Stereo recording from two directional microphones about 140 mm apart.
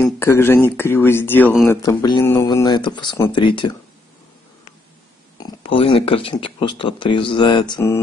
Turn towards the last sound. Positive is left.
turn(degrees=35)  # may be behind; listen again after turning